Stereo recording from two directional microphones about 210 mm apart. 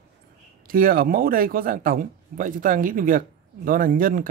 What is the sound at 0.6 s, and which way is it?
A man's voice, 45° right (ahead or behind).